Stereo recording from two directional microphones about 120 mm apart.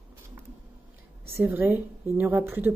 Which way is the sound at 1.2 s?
20° right (ahead or behind).